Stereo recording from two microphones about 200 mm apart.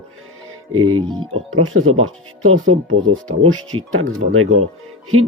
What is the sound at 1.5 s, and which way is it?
Speech, 90° right.